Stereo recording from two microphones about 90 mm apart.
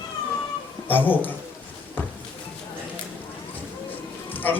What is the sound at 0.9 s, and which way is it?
Speech, 20° left (ahead or behind).